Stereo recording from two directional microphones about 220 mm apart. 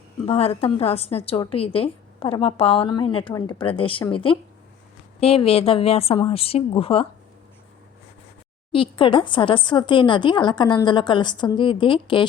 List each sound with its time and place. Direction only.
0.3 s a woman's voice: 25° left (ahead or behind)
8.7 s a woman's voice: 25° left (ahead or behind)